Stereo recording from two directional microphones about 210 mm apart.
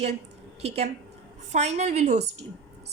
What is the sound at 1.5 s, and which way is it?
Speech, 35° right (ahead or behind).